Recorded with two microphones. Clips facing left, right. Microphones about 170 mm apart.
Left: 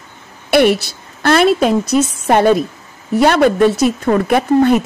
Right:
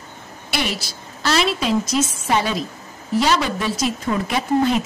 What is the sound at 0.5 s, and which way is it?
A woman's voice, 60° left (ahead or behind).